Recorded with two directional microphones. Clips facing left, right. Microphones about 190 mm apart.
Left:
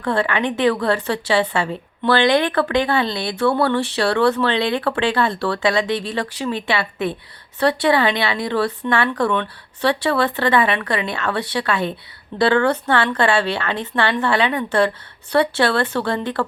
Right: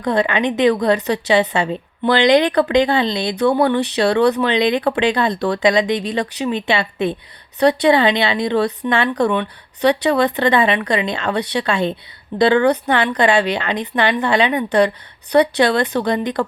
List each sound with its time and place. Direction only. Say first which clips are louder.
0.0 s a woman's voice: right 3 dB; 20° right (ahead or behind)